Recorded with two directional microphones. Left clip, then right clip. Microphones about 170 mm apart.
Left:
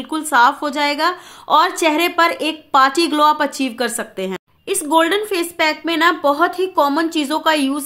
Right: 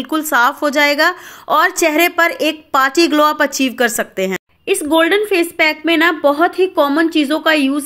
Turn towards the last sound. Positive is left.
turn(degrees=-15)  # may be behind; listen again after turning